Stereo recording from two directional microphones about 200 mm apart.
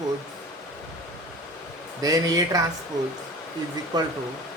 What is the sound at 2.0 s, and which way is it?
Speech, 20° right (ahead or behind).